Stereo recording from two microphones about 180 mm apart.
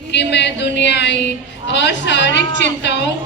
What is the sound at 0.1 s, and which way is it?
A woman's voice, 70° left (ahead or behind).